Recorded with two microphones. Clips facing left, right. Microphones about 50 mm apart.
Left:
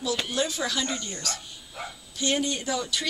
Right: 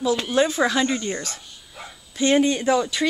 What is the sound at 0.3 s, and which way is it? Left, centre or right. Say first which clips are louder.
A woman's voice: right 9 dB; right.